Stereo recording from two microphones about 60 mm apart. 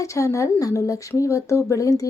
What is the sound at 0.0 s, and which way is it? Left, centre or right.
A woman's voice, left.